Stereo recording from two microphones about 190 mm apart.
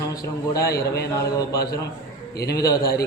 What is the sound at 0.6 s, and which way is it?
Speech, 55° left (ahead or behind).